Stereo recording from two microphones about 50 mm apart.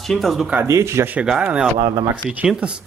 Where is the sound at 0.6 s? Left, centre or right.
Right.